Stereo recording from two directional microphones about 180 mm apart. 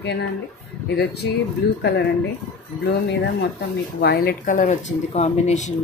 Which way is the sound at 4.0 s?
60° left (ahead or behind).